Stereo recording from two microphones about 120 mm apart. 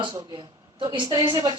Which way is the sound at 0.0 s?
35° right (ahead or behind).